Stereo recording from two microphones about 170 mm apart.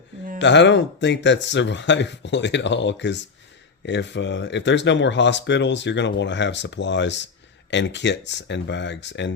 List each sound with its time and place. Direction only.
0.3 s speech: 90° left